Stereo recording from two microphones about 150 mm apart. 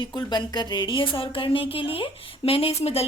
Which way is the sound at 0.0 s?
30° left (ahead or behind).